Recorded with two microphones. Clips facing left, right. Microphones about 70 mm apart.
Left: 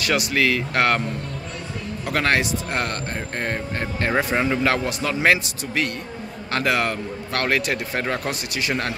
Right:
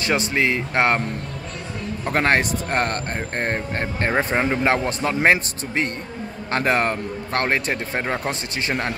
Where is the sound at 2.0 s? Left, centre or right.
Right.